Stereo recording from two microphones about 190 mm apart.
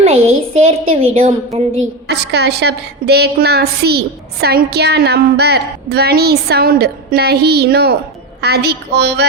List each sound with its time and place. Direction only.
0.5 s a woman's voice: 30° right (ahead or behind)
2.0 s a woman's voice: 60° right (ahead or behind)